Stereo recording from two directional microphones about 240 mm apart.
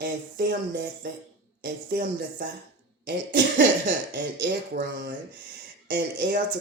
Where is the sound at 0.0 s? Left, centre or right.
Right.